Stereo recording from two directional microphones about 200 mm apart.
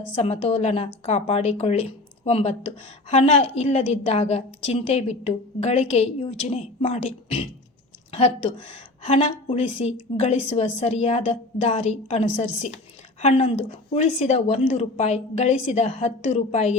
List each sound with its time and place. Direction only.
0.2 s a woman's voice: 30° left (ahead or behind)